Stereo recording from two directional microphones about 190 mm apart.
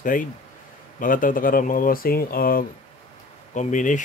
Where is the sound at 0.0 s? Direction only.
45° left (ahead or behind).